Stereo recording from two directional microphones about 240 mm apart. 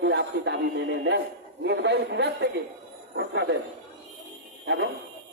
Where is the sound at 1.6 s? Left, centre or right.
Right.